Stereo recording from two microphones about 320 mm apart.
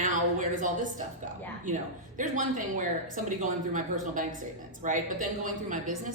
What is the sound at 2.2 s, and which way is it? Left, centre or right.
A woman's voice, right.